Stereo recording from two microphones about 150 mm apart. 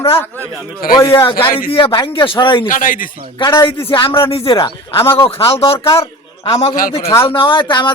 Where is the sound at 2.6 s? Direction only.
65° left (ahead or behind).